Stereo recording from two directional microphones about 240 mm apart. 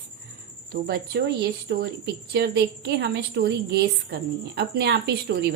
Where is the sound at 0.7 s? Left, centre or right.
Right.